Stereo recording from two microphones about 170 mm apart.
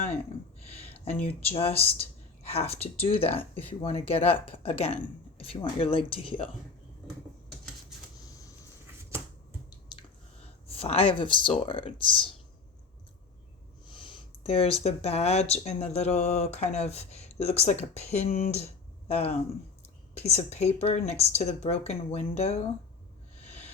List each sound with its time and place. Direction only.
0.6 s a sound: 35° left (ahead or behind)
0.9 s speech: 10° left (ahead or behind)
1.5 s speech: 35° left (ahead or behind)
10.8 s speech: 35° left (ahead or behind)
13.8 s speech: 30° left (ahead or behind)
18.5 s a sound: 40° left (ahead or behind)
19.8 s speech: 40° left (ahead or behind)